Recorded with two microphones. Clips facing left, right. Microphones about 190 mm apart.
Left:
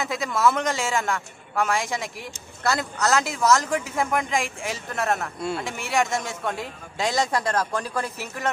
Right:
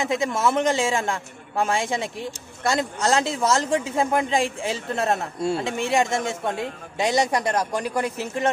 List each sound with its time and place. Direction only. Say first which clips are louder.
0.0 s a man's voice: right 1 dB; 25° right (ahead or behind)